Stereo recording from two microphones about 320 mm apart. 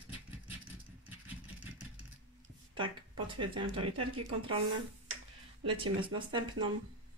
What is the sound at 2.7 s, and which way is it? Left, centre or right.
Speech, centre.